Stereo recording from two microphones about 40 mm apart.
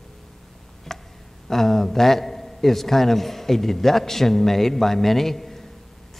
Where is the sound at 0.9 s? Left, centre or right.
Centre.